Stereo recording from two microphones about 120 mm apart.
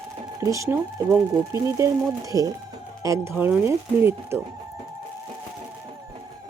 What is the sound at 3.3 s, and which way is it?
Speech, 15° right (ahead or behind).